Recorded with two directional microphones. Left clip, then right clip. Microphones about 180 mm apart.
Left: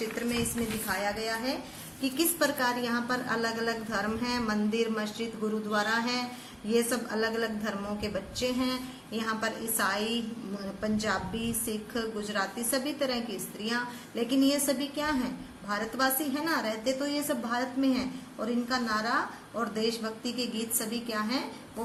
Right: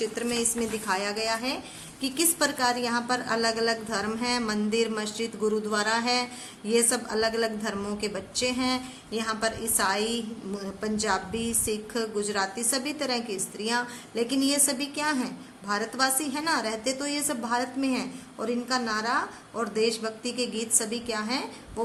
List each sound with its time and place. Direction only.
0.9 s a woman's voice: 45° right (ahead or behind)